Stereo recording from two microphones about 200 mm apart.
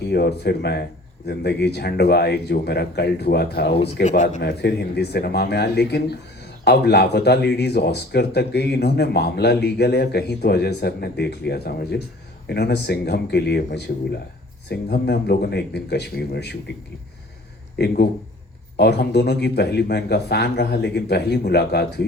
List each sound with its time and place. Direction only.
0.0 s speech: 55° left (ahead or behind)
4.0 s speech: 40° left (ahead or behind)
4.4 s speech: 55° left (ahead or behind)
14.7 s speech: 55° left (ahead or behind)
17.7 s speech: 55° left (ahead or behind)